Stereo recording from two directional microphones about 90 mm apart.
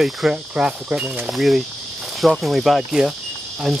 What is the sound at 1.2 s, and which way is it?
Speech, centre (ahead or behind).